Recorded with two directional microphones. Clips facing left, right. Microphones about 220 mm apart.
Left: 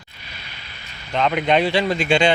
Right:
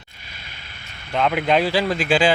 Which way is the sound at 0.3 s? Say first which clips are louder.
Left 2 dB; 50° right (ahead or behind).